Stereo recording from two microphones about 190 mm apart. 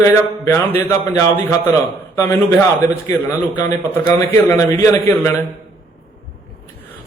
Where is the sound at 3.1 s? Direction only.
10° left (ahead or behind).